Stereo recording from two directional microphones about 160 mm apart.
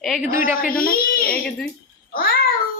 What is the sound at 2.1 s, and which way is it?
Babbling, 65° left (ahead or behind).